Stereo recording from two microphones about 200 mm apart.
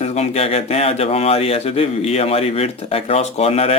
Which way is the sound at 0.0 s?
35° left (ahead or behind).